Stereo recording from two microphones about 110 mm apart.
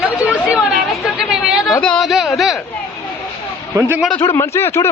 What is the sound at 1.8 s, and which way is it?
Speech, 10° left (ahead or behind).